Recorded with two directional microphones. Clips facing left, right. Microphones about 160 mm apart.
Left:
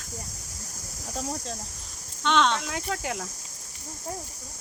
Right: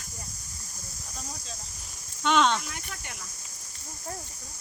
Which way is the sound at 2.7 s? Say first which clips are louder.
Left 11 dB; 90° left.